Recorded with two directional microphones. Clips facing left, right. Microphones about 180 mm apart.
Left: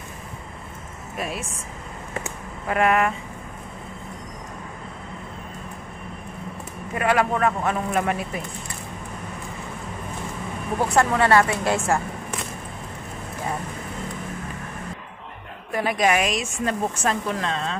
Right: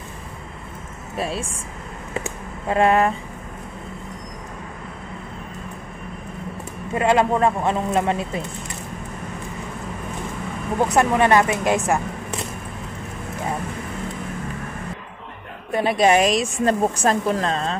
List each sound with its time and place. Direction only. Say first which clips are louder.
1.1 s speech: right 4 dB; 30° right (ahead or behind)
2.1 s a sound: right 4 dB; 25° right (ahead or behind)
6.9 s speech: right 3 dB; 25° right (ahead or behind)
10.9 s speech: right 1 dB; 20° right (ahead or behind)
15.7 s a woman's voice: right 4 dB; 25° right (ahead or behind)